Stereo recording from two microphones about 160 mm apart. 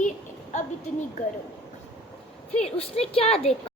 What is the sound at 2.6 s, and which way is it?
Speech, 40° left (ahead or behind).